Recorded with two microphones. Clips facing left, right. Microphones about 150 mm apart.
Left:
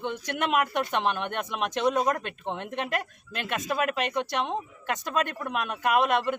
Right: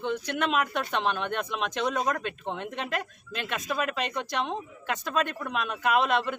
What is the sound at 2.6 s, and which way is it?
Speech, 55° left (ahead or behind).